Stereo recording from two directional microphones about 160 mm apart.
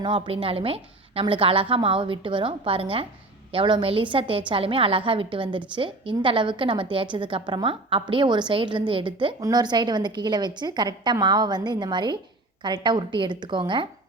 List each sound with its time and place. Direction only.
0.0 s a woman's voice: 30° right (ahead or behind)